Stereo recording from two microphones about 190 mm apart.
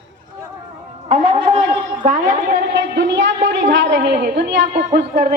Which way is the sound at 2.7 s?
70° right (ahead or behind).